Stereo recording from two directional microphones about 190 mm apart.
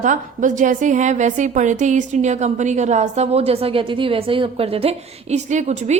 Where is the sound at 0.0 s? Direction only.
40° right (ahead or behind).